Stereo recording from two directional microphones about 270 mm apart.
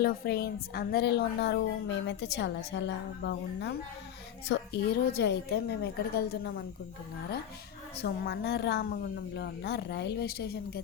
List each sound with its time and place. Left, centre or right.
0.0 s a woman's voice: left
8.0 s a woman's voice: left